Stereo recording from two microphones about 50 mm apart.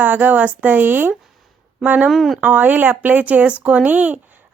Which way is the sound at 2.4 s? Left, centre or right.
Right.